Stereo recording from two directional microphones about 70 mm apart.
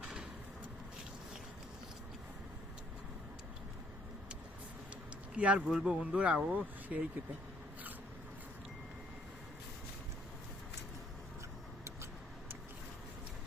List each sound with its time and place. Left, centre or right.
5.4 s speech: centre